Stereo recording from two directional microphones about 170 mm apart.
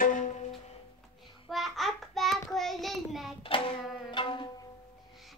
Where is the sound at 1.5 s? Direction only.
Centre (ahead or behind).